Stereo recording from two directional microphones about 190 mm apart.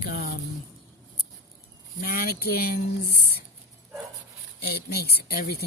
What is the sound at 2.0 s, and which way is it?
Speech, 55° left (ahead or behind).